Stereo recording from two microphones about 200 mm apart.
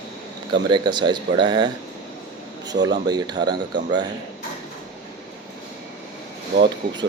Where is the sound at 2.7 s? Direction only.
60° right (ahead or behind).